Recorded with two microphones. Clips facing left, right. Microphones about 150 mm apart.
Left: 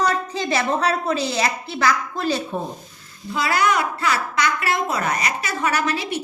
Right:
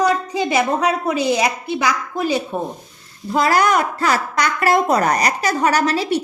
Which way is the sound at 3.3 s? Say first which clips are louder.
Right 5 dB; 40° right (ahead or behind).